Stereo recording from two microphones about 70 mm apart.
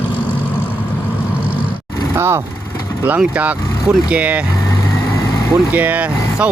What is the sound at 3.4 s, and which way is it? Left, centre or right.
Speech, centre.